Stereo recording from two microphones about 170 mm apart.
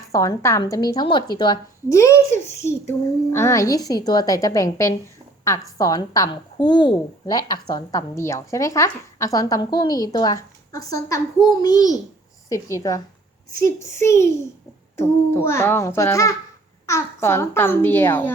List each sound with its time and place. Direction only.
0.1 s a woman's voice: 20° left (ahead or behind)